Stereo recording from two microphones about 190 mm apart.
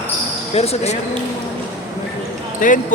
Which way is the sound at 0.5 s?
35° left (ahead or behind).